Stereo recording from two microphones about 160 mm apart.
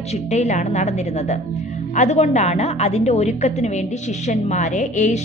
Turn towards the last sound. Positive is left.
turn(degrees=50)  # may be behind; listen again after turning